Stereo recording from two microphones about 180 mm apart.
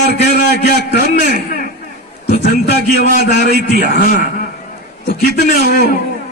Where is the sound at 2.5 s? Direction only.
60° left (ahead or behind).